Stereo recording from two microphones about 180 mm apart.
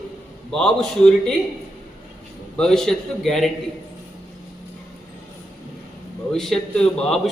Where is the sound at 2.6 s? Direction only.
5° left (ahead or behind).